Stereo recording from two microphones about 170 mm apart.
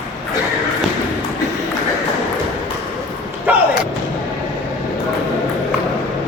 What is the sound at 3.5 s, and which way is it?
Slam, 10° right (ahead or behind).